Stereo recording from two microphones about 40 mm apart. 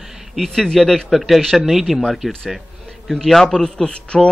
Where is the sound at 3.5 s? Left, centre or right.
Left.